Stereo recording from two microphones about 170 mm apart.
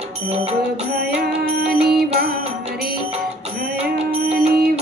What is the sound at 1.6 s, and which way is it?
Music, 70° right (ahead or behind).